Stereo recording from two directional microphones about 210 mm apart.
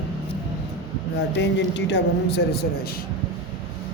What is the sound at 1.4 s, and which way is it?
Speech, 55° left (ahead or behind).